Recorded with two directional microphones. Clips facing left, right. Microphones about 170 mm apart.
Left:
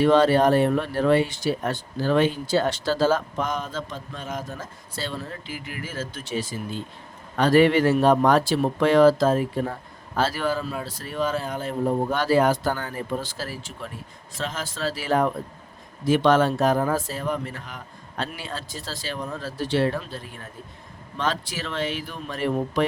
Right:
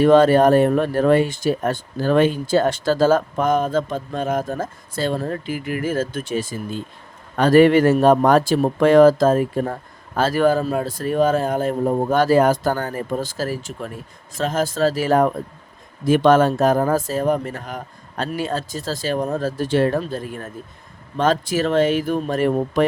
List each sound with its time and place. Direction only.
0.0 s speech: 45° right (ahead or behind)